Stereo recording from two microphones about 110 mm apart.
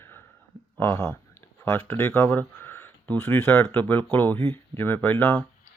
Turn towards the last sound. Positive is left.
turn(degrees=15)  # may be behind; listen again after turning